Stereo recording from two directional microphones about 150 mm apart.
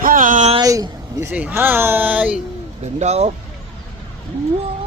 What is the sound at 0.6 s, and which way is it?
Speech, 25° right (ahead or behind).